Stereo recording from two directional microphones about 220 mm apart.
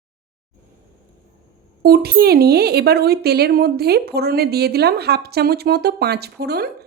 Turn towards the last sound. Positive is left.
turn(degrees=-45)  # may be behind; listen again after turning